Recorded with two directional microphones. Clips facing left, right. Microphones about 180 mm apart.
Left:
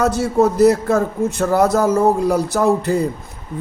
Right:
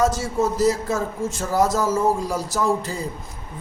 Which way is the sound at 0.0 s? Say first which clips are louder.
Left 5 dB; 60° left (ahead or behind).